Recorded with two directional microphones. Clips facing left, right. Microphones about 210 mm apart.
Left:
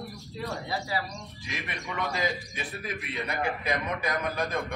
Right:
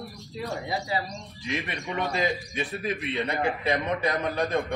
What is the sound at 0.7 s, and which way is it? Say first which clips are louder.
Speech: right 3 dB; 20° right (ahead or behind).